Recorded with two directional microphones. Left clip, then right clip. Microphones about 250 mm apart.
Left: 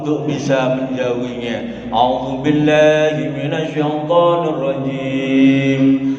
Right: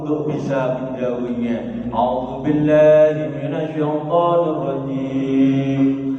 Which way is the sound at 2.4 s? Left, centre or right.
Left.